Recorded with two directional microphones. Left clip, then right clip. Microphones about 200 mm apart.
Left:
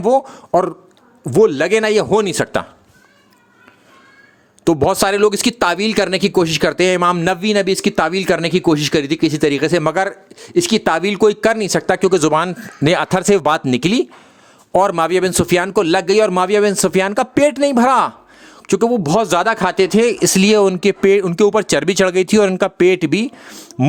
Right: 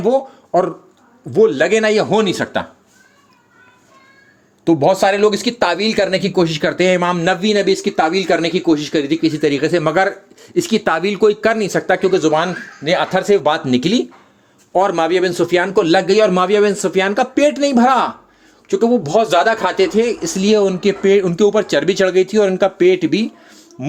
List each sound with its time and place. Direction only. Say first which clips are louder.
0.0 s a man's voice: left 1 dB; 40° left (ahead or behind)
4.6 s a man's voice: right 2 dB; 40° left (ahead or behind)